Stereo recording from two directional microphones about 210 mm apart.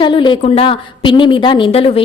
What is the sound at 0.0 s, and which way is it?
A woman's voice, 20° left (ahead or behind).